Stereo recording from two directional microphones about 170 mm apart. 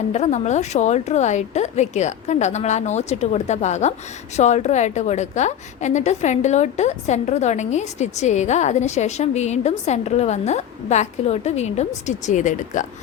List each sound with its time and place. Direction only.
0.1 s a woman's voice: 45° left (ahead or behind)